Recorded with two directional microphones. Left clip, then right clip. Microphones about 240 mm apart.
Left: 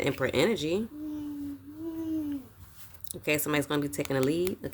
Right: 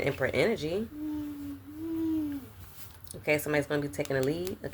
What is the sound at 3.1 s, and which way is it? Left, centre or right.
Speech, left.